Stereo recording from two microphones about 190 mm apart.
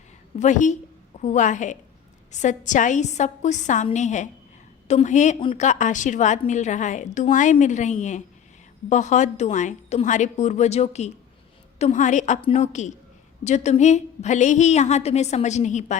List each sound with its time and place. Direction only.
0.3 s a woman's voice: 40° left (ahead or behind)